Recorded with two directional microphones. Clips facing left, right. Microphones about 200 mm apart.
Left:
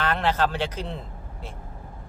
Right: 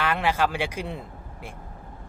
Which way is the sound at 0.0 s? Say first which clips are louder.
Even; 10° right (ahead or behind).